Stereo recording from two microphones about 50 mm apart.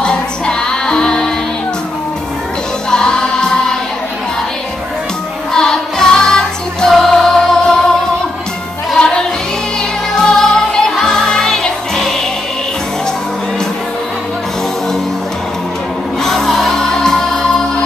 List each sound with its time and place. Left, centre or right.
0.0 s music: centre
2.9 s music: centre
5.5 s music: centre
8.9 s music: centre
16.2 s music: centre